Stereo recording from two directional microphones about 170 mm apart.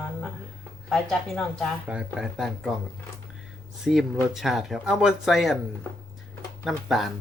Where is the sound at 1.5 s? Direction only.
5° right (ahead or behind).